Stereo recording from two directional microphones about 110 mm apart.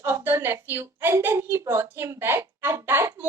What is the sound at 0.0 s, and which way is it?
A woman's voice, 20° right (ahead or behind).